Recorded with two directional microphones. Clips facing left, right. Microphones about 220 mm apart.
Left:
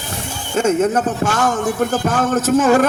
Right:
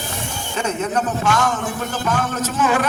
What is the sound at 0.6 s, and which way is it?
A man's voice, 45° left (ahead or behind).